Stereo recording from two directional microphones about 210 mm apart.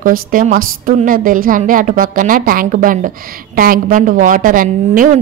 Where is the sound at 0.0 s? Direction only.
40° right (ahead or behind).